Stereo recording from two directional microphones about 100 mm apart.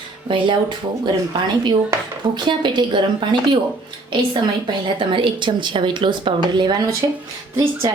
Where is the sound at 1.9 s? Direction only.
30° right (ahead or behind).